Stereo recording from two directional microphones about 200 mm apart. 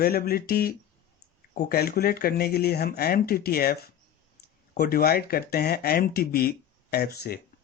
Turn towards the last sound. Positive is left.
turn(degrees=50)  # may be behind; listen again after turning